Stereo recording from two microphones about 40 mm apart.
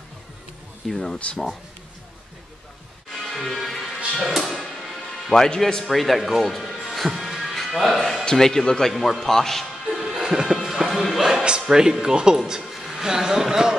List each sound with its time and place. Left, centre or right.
0.8 s speech: centre
1.1 s speech: left
3.1 s music: centre
5.3 s speech: centre
5.9 s speech: centre
6.9 s music: centre
8.3 s speech: centre
8.9 s speech: centre
9.8 s music: centre
10.1 s music: centre
10.9 s music: centre
11.6 s speech: centre